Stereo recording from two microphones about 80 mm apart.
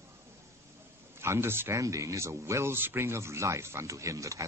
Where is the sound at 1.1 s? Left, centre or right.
Right.